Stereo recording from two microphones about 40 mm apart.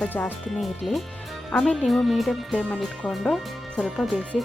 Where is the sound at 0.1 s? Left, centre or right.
Left.